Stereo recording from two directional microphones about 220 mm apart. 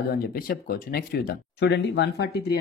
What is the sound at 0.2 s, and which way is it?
Speech, 40° left (ahead or behind).